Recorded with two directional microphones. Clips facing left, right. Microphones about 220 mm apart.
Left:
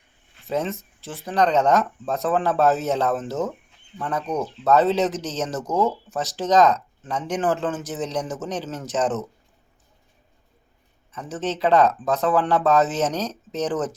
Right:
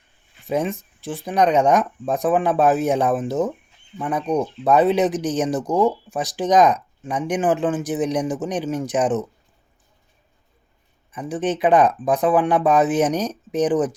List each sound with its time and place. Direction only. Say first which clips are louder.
0.4 s speech: right 3 dB; 15° right (ahead or behind)
11.1 s speech: right 4 dB; 15° right (ahead or behind)